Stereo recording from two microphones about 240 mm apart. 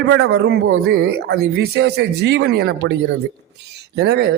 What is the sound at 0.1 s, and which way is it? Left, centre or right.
Speech, right.